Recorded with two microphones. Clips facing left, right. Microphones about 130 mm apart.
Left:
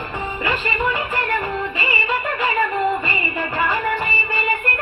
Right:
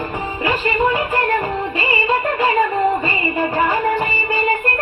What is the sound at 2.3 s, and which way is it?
Music, 25° right (ahead or behind).